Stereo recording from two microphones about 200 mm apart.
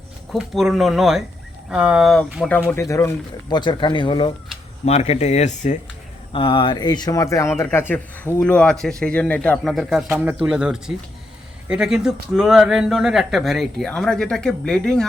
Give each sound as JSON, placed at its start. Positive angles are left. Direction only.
{"t": 0.3, "sound": "speech", "side_deg": 0}
{"t": 2.6, "sound": "speech", "side_deg": 15}
{"t": 6.3, "sound": "speech", "side_deg": 25}